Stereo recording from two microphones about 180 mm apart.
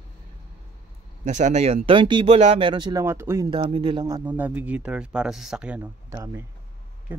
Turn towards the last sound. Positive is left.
turn(degrees=-15)  # may be behind; listen again after turning